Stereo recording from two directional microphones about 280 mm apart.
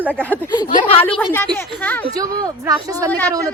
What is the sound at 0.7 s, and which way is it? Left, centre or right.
Speech, left.